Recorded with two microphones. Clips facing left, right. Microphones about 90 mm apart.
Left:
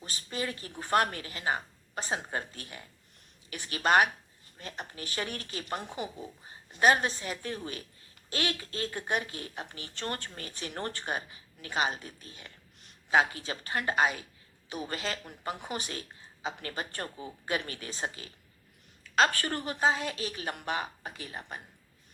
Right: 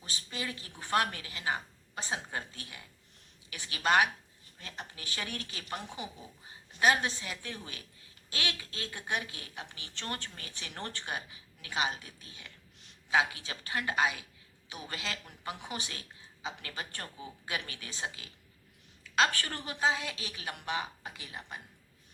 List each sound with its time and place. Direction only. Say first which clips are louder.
0.0 s a woman's voice: left 4 dB; 40° left (ahead or behind)